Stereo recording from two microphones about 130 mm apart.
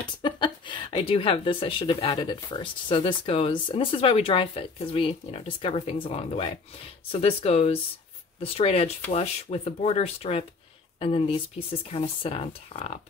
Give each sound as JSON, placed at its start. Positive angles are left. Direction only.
{"t": 0.2, "sound": "speech", "side_deg": 40}